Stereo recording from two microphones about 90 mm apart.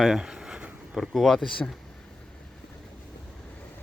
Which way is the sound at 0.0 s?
5° right (ahead or behind).